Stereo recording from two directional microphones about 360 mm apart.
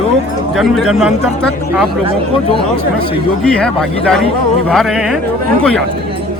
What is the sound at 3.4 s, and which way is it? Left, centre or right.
Speech, centre.